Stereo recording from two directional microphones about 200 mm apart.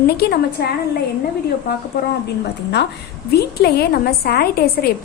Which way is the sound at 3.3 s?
50° left (ahead or behind).